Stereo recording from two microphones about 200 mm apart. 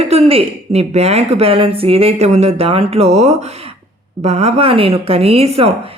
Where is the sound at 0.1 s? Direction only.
30° right (ahead or behind).